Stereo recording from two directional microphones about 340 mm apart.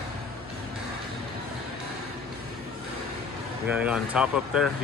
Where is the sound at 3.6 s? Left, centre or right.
Centre.